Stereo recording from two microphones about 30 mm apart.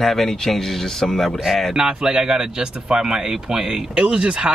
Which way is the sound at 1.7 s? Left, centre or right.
Right.